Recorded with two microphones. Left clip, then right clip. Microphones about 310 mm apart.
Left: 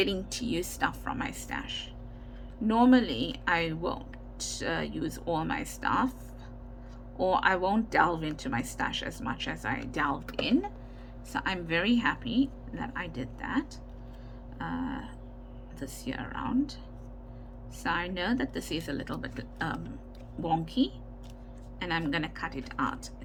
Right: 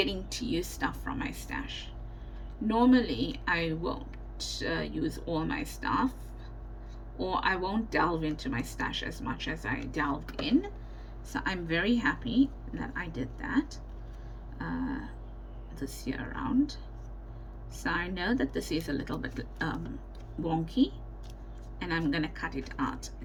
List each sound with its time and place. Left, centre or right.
0.0 s speech: centre
7.2 s a woman's voice: centre
17.8 s a woman's voice: centre